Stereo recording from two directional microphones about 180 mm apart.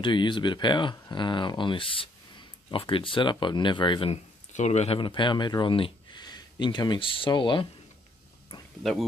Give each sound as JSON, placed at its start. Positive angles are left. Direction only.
{"t": 0.0, "sound": "speech", "side_deg": 25}